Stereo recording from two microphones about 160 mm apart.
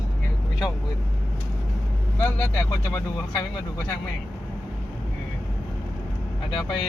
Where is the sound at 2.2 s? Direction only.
15° left (ahead or behind).